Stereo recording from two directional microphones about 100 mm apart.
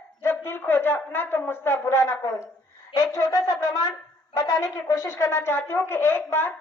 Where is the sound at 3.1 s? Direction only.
40° left (ahead or behind).